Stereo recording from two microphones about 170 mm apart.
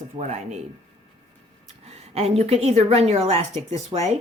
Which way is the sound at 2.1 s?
35° right (ahead or behind).